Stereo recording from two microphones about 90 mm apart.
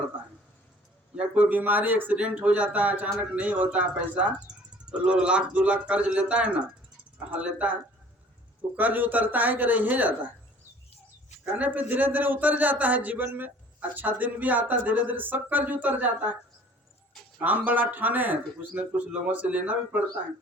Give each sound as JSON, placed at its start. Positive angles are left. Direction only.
{"t": 1.1, "sound": "a man's voice", "side_deg": -15}
{"t": 11.5, "sound": "a man's voice", "side_deg": -20}
{"t": 17.4, "sound": "speech", "side_deg": -20}